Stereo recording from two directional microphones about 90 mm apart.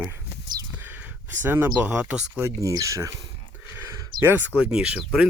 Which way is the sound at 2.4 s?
35° right (ahead or behind).